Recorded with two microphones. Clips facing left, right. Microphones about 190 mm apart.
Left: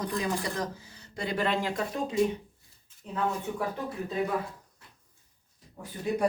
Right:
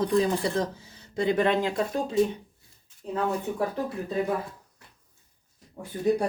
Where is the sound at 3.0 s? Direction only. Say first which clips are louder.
Right 7 dB; 35° right (ahead or behind).